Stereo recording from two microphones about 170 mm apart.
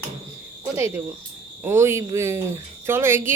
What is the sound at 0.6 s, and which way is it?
Speech, 15° right (ahead or behind).